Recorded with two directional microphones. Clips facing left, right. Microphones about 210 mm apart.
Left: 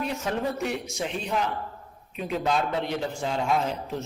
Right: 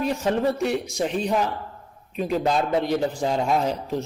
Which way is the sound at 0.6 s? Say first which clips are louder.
Right 6 dB; 35° right (ahead or behind).